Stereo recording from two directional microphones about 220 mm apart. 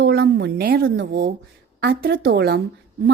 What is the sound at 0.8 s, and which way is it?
A woman's voice, 55° right (ahead or behind).